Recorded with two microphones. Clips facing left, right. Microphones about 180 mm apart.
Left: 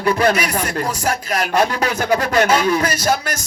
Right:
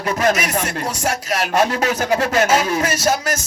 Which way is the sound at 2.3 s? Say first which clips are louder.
Left 1 dB; 40° right (ahead or behind).